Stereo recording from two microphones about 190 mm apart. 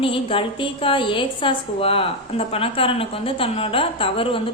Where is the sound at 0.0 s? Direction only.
30° left (ahead or behind).